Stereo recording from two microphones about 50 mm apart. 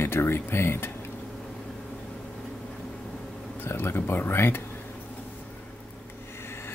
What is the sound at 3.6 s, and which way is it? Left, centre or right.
Speech, left.